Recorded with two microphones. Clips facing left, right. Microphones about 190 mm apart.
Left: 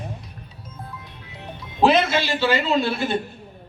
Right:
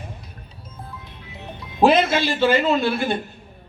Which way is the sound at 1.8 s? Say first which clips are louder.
Right 2 dB; 50° right (ahead or behind).